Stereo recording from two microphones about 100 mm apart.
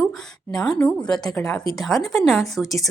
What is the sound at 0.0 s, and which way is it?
Speech, 5° left (ahead or behind).